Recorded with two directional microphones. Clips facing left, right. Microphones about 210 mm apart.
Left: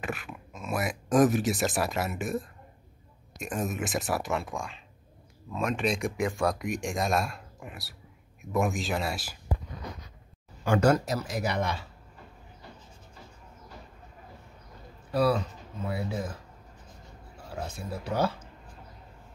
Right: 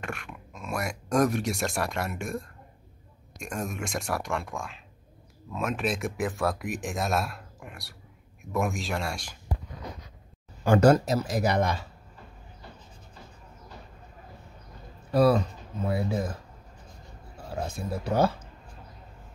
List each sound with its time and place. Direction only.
0.0 s speech: 5° left (ahead or behind)
10.6 s speech: 35° right (ahead or behind)
15.1 s speech: 40° right (ahead or behind)
17.6 s speech: 45° right (ahead or behind)